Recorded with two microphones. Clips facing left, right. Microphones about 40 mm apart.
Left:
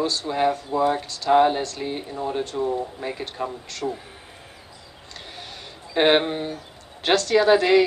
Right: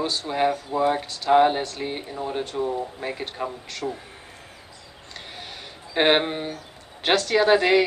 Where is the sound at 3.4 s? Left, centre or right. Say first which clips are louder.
Left 1 dB; right.